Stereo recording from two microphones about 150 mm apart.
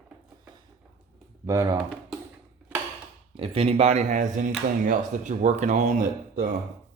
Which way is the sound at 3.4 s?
40° right (ahead or behind).